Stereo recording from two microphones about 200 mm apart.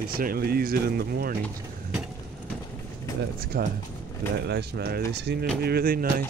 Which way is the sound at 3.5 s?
45° right (ahead or behind).